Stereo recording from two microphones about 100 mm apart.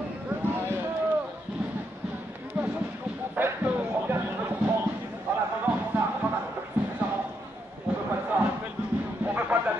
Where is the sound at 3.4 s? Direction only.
20° right (ahead or behind).